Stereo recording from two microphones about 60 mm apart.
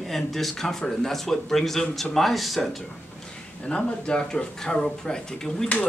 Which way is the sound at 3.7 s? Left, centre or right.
Centre.